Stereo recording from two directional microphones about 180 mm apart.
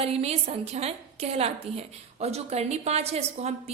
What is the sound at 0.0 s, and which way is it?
A woman's voice, 35° right (ahead or behind).